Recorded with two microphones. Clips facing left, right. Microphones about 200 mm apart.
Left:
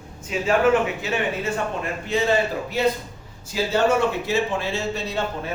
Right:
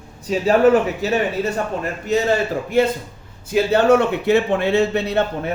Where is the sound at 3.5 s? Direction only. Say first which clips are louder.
Right 6 dB; 60° right (ahead or behind).